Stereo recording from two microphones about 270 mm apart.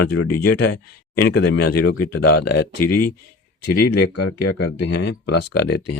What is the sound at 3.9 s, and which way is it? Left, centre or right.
Speech, left.